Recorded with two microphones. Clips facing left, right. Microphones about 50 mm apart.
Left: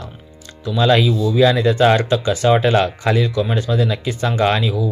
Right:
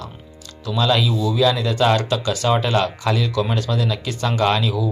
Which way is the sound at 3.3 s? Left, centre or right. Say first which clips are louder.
Left 2 dB; centre.